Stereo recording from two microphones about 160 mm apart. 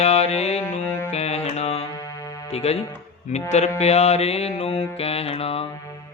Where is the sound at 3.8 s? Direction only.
40° left (ahead or behind).